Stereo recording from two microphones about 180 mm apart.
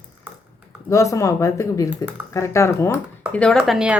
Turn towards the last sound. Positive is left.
turn(degrees=-5)  # may be behind; listen again after turning